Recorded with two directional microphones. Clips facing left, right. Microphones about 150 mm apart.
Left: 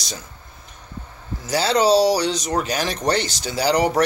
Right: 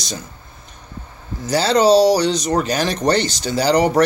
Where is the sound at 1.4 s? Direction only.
5° left (ahead or behind).